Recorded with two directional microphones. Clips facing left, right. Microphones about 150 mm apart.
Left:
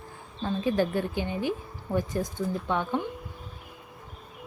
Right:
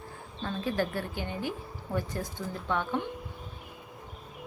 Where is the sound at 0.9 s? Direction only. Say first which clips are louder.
Left 5 dB; 20° left (ahead or behind).